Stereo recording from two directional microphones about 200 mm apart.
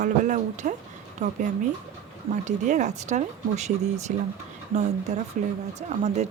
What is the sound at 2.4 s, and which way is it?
Speech, 35° right (ahead or behind).